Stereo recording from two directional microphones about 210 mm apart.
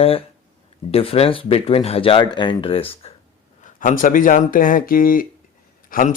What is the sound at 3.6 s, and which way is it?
Speech, 40° left (ahead or behind).